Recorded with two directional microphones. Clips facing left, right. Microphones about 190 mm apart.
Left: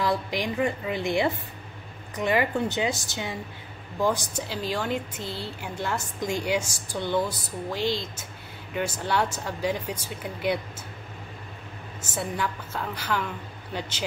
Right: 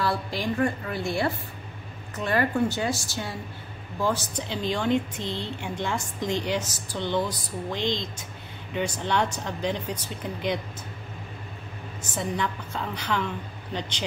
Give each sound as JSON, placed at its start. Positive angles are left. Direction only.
{"t": 0.0, "sound": "a woman's voice", "side_deg": 15}
{"t": 12.0, "sound": "a woman's voice", "side_deg": 5}